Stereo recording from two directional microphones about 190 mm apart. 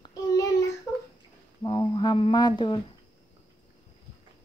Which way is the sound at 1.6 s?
25° left (ahead or behind).